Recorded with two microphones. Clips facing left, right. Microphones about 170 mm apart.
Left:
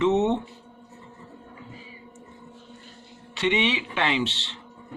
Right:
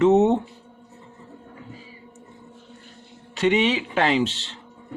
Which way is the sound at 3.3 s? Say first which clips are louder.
Right 4 dB; 40° right (ahead or behind).